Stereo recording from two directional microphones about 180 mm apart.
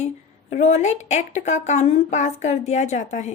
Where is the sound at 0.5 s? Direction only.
40° left (ahead or behind).